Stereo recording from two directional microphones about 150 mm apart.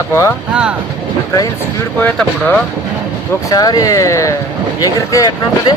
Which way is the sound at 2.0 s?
10° left (ahead or behind).